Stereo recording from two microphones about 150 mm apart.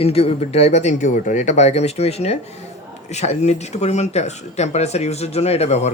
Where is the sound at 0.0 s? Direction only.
40° left (ahead or behind).